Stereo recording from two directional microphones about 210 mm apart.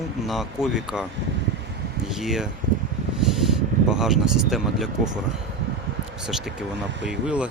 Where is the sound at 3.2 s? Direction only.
Centre (ahead or behind).